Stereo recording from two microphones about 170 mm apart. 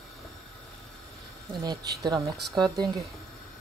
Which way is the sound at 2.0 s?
20° right (ahead or behind).